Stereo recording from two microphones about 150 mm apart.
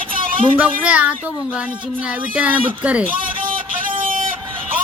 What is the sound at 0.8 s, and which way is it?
Speech, 10° right (ahead or behind).